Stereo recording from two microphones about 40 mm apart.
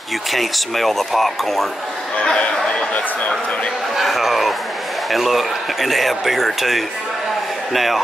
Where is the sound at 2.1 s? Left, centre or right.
Left.